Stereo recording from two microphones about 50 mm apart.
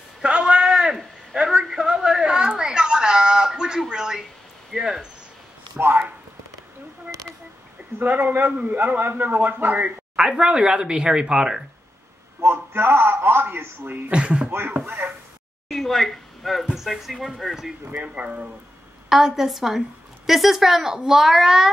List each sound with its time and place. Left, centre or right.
0.2 s a sound: centre
4.7 s speech: centre
8.0 s a man's voice: right
10.1 s speech: centre
12.4 s a sound: right
14.1 s speech: centre
14.5 s speech: right
15.0 s a sound: right
15.7 s speech: centre
18.0 s speech: right
19.0 s speech: centre